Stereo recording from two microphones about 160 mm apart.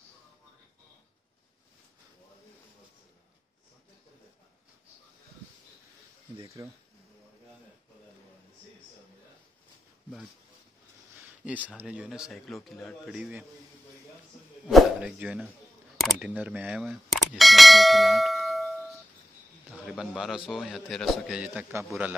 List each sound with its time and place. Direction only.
6.4 s speech: 20° right (ahead or behind)
11.4 s speech: 10° right (ahead or behind)
14.7 s speech: centre (ahead or behind)